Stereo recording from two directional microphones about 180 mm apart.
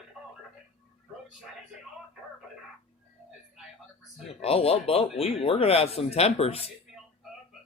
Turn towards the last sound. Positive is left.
turn(degrees=35)  # may be behind; listen again after turning